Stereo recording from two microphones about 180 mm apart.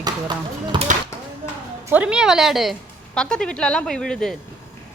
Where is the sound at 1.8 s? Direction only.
10° right (ahead or behind).